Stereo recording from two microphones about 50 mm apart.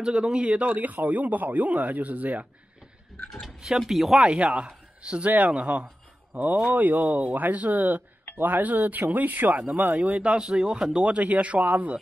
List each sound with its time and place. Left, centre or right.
0.0 s a man's voice: centre
3.4 s speech: centre
4.2 s a man's voice: right
11.1 s a man's voice: right